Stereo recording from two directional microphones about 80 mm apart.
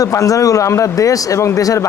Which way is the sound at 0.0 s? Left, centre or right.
Left.